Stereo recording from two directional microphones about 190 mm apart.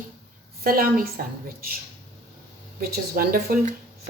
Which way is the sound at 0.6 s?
50° right (ahead or behind).